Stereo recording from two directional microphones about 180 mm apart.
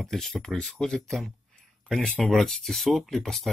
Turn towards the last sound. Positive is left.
turn(degrees=0)  # may be behind; listen again after turning